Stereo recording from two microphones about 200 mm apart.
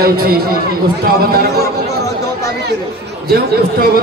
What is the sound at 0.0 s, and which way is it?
A man's voice, 50° right (ahead or behind).